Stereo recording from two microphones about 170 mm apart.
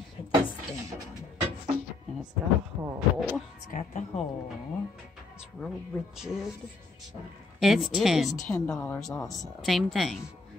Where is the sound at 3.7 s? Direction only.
45° left (ahead or behind).